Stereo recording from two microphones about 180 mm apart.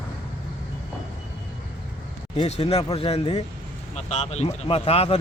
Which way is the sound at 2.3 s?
35° left (ahead or behind).